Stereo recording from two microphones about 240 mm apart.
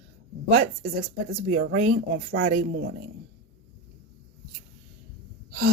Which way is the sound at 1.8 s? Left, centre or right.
Right.